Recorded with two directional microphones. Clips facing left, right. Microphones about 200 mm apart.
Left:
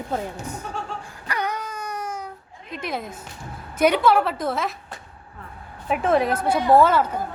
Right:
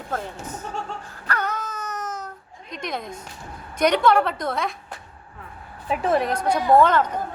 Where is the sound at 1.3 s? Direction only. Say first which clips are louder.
Even; 15° left (ahead or behind).